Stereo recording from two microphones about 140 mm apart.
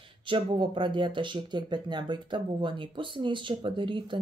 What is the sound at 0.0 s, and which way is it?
Speech, 35° right (ahead or behind).